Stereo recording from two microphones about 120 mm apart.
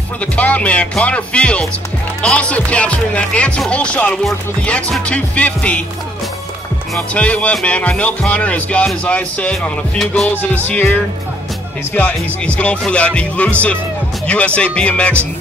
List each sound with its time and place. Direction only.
0.2 s speech: 10° left (ahead or behind)
7.0 s speech: 10° left (ahead or behind)